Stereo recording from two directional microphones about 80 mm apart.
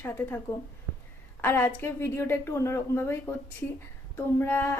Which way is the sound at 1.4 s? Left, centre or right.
Left.